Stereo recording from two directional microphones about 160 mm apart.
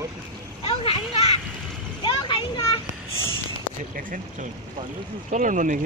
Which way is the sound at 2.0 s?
30° left (ahead or behind).